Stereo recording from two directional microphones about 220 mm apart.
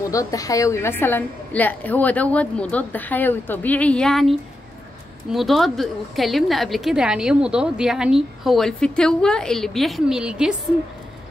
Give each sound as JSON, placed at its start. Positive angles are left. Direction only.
{"t": 0.1, "sound": "a woman's voice", "side_deg": 15}